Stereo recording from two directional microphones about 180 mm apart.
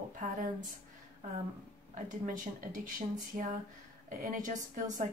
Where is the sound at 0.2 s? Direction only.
45° right (ahead or behind).